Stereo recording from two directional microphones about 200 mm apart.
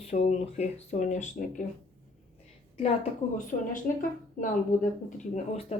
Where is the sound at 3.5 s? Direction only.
45° left (ahead or behind).